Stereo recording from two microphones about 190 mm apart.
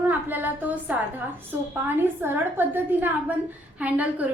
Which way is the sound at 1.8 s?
10° right (ahead or behind).